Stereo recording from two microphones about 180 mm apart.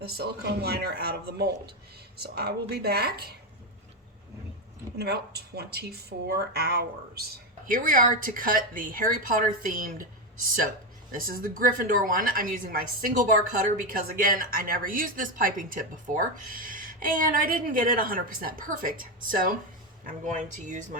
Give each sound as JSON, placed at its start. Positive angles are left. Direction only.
{"t": 0.0, "sound": "speech", "side_deg": -60}
{"t": 4.9, "sound": "speech", "side_deg": -65}
{"t": 11.1, "sound": "speech", "side_deg": -55}